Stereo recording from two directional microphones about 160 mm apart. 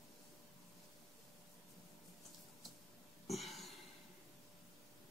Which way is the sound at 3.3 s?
Centre (ahead or behind).